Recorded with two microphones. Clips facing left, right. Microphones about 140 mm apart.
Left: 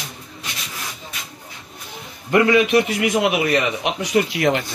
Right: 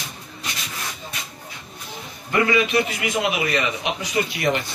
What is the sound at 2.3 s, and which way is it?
Speech, 70° left (ahead or behind).